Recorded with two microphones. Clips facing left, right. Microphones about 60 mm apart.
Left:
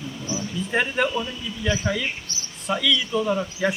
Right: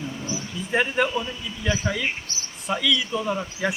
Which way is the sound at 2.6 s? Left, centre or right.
Centre.